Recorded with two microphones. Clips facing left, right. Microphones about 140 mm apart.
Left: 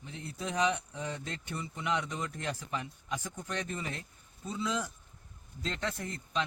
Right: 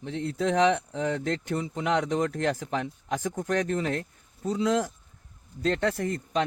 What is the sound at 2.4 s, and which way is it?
Speech, 70° right (ahead or behind).